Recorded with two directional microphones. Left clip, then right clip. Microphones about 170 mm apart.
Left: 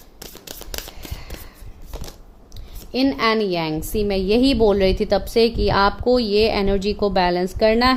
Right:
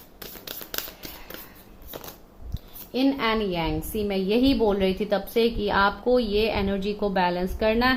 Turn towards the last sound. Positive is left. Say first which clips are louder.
# left 6 dB
turn(degrees=60)  # may be behind; listen again after turning